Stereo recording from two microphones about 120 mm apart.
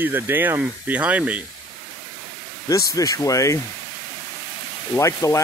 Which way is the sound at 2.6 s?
30° left (ahead or behind).